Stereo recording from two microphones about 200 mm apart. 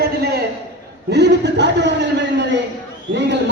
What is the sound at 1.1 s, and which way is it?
A man's voice, 60° right (ahead or behind).